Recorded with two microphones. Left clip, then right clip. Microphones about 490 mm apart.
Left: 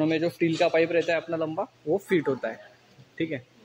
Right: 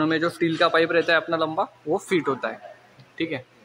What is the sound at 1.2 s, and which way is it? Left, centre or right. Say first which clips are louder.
Speech: right 5 dB; left.